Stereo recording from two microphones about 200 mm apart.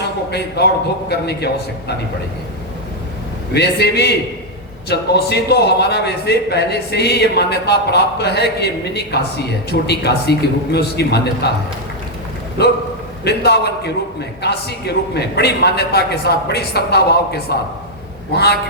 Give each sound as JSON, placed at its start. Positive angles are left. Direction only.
{"t": 0.3, "sound": "a man's voice", "side_deg": 55}
{"t": 3.5, "sound": "a man's voice", "side_deg": 55}
{"t": 12.6, "sound": "a man's voice", "side_deg": 55}